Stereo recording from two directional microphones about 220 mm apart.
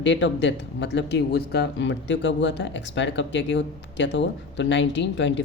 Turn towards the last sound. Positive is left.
turn(degrees=55)  # may be behind; listen again after turning